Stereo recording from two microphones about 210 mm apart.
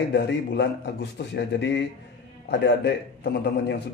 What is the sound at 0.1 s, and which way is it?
A man's voice, 55° left (ahead or behind).